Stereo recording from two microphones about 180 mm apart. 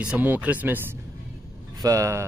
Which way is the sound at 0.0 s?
10° right (ahead or behind).